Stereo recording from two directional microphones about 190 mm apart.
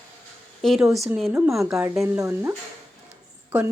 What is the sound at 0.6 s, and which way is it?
Speech, centre (ahead or behind).